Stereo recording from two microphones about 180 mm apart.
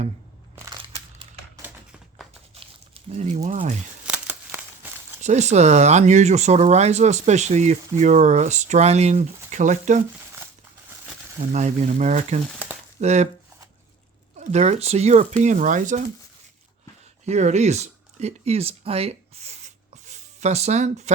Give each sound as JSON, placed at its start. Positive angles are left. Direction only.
{"t": 2.2, "sound": "crumpling", "side_deg": 0}
{"t": 2.6, "sound": "a sound", "side_deg": -30}
{"t": 4.0, "sound": "crumpling", "side_deg": -5}
{"t": 5.2, "sound": "speech", "side_deg": -40}
{"t": 11.5, "sound": "speech", "side_deg": -40}
{"t": 14.3, "sound": "speech", "side_deg": -40}
{"t": 17.2, "sound": "speech", "side_deg": -40}